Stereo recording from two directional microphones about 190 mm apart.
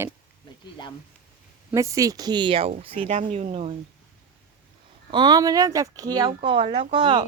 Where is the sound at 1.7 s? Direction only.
15° right (ahead or behind); by 3.7 s 35° right (ahead or behind).